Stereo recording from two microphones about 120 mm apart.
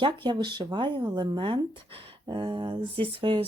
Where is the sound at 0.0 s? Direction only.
40° right (ahead or behind).